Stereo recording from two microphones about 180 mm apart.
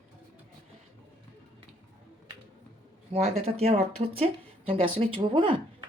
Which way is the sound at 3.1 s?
35° right (ahead or behind).